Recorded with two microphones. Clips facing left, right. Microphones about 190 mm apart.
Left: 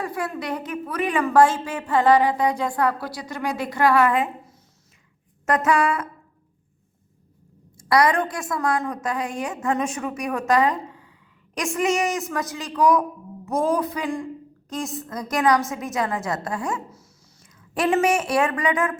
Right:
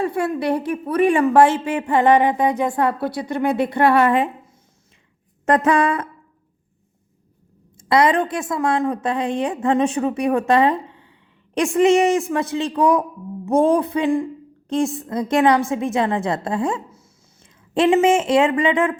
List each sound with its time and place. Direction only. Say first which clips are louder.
0.0 s a woman's voice: right 7 dB; 25° right (ahead or behind)
3.2 s speech: right 7 dB; 60° right (ahead or behind)
3.7 s a woman's voice: right 1 dB; 30° right (ahead or behind)
5.5 s a sound: right 4 dB; 30° right (ahead or behind)
7.8 s a woman's voice: right 3 dB; 25° right (ahead or behind)